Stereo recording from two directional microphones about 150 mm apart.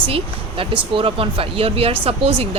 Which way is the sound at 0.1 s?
35° right (ahead or behind).